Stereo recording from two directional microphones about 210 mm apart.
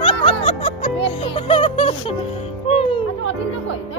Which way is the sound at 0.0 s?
25° left (ahead or behind).